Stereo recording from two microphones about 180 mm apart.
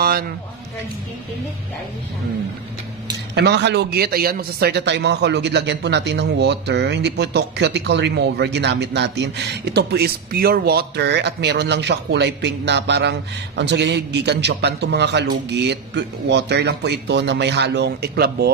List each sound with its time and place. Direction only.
3.3 s a man's voice: 70° right (ahead or behind)